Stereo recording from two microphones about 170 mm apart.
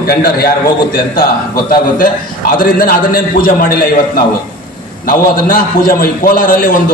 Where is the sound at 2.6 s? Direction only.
55° left (ahead or behind).